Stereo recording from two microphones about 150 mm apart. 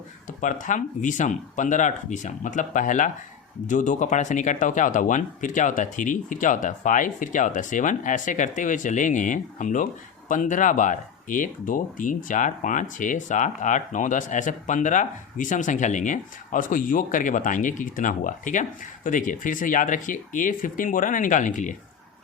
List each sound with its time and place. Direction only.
0.3 s speech: 60° left (ahead or behind)